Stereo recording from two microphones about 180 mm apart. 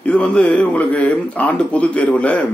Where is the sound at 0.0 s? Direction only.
5° left (ahead or behind).